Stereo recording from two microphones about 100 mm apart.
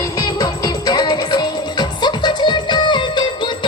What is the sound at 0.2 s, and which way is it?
Music, 40° left (ahead or behind).